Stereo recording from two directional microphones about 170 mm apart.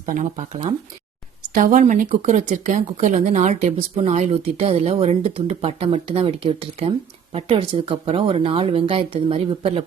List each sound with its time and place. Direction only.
0.0 s speech: 50° right (ahead or behind)